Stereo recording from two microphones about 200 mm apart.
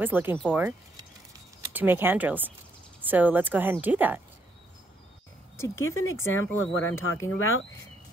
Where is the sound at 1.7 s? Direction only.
10° right (ahead or behind).